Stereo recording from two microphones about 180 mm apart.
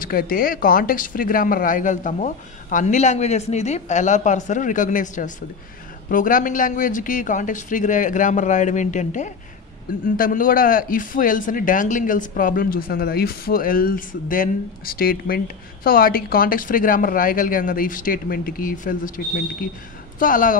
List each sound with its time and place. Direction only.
0.0 s speech: 55° left (ahead or behind)